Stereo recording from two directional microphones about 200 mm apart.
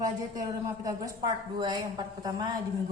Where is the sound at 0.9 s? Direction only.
20° right (ahead or behind).